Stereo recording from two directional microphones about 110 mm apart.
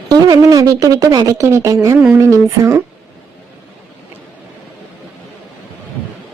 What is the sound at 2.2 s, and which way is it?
Speech, 30° right (ahead or behind).